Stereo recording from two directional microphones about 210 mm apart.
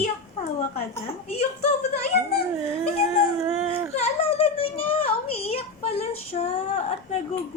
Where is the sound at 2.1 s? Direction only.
50° left (ahead or behind).